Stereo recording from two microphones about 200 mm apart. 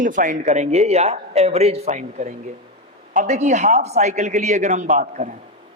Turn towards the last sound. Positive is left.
turn(degrees=-40)  # may be behind; listen again after turning